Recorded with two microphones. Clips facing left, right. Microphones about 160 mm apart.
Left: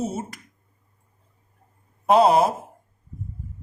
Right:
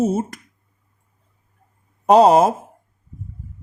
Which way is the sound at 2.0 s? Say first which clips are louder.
Right 5 dB; 40° right (ahead or behind).